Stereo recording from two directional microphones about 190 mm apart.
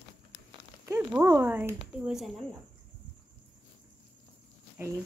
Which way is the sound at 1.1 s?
10° right (ahead or behind).